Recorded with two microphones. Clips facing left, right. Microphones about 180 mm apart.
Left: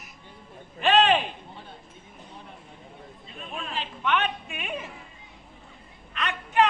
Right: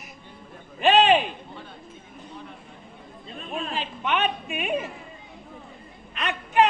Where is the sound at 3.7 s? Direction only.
15° right (ahead or behind).